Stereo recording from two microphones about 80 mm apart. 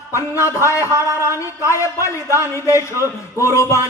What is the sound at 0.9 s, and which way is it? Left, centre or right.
Speech, right.